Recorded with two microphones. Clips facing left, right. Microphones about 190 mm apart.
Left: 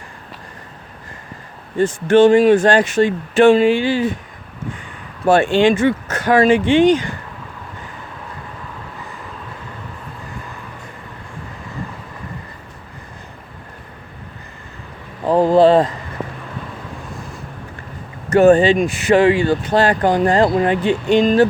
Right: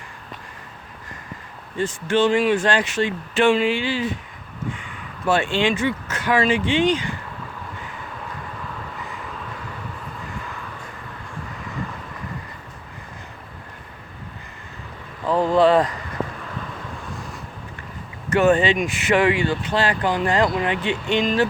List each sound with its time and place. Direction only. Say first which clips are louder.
1.8 s speech: left 8 dB; 50° left (ahead or behind)
5.2 s speech: left 7 dB; 45° left (ahead or behind)
15.2 s a sound: left 5 dB; 35° left (ahead or behind)
18.3 s speech: left 6 dB; 35° left (ahead or behind)